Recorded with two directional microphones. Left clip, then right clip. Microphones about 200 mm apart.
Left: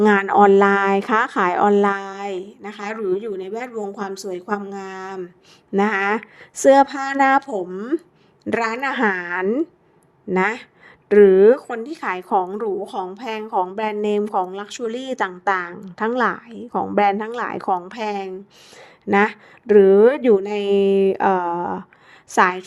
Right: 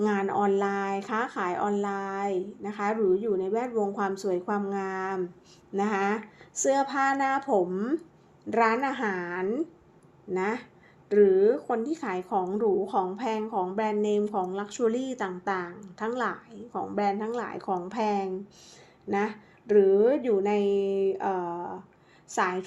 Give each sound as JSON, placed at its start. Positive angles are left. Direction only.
{"t": 0.0, "sound": "speech", "side_deg": 40}
{"t": 5.7, "sound": "a woman's voice", "side_deg": 40}